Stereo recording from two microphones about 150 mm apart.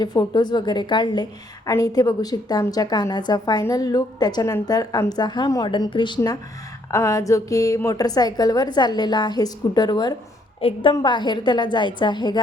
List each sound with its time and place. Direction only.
0.0 s a woman's voice: 25° left (ahead or behind)
10.6 s a woman's voice: 40° left (ahead or behind)